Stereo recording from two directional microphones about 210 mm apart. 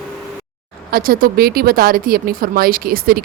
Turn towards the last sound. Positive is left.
turn(degrees=-45)  # may be behind; listen again after turning